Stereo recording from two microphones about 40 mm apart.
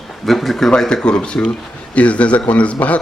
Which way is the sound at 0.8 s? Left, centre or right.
Centre.